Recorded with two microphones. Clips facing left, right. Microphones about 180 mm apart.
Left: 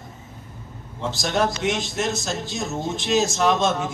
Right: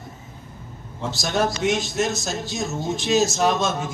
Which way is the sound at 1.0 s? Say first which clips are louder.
Even; 45° right (ahead or behind).